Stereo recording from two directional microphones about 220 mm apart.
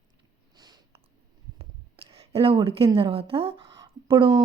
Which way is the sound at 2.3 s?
25° right (ahead or behind).